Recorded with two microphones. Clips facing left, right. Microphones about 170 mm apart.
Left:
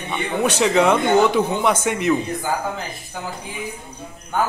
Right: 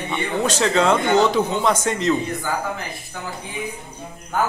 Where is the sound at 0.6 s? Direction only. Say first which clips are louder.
Left 2 dB; 15° left (ahead or behind).